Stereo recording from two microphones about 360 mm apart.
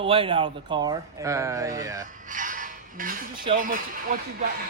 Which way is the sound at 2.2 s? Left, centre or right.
Right.